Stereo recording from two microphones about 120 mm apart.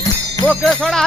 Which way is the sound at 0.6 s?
5° left (ahead or behind).